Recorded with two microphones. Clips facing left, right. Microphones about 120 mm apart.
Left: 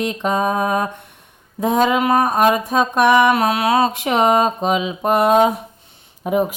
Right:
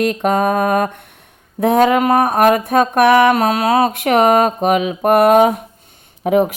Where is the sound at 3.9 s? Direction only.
60° right (ahead or behind).